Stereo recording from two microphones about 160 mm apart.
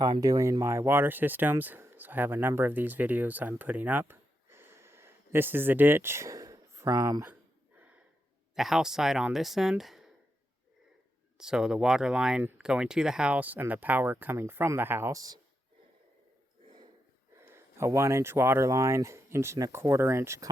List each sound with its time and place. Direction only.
0.0 s speech: 25° right (ahead or behind)
8.5 s speech: 5° right (ahead or behind)
11.3 s speech: 5° right (ahead or behind); by 15.4 s 20° right (ahead or behind)
17.4 s speech: 15° right (ahead or behind)